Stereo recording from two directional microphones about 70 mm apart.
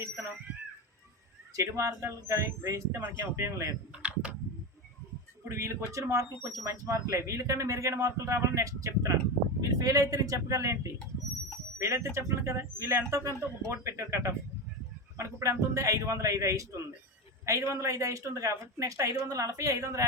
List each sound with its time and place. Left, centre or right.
1.5 s speech: right
3.9 s computer keyboard: centre
5.5 s speech: right